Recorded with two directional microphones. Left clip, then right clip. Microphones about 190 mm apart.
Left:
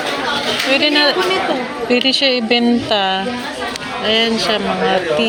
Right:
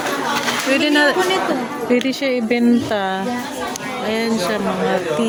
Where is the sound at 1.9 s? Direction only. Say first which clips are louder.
Left 5 dB; 15° right (ahead or behind).